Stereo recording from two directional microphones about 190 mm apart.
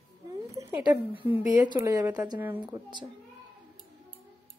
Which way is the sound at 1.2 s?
10° right (ahead or behind).